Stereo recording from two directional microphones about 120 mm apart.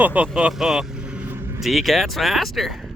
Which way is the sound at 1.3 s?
20° right (ahead or behind).